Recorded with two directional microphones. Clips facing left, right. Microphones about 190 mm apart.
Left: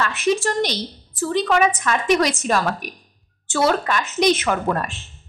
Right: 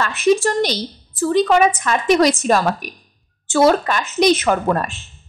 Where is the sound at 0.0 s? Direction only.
40° right (ahead or behind).